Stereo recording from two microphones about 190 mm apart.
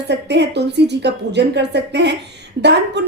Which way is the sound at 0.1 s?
65° right (ahead or behind).